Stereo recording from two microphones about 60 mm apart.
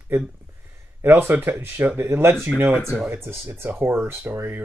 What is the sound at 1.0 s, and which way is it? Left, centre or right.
Speech, right.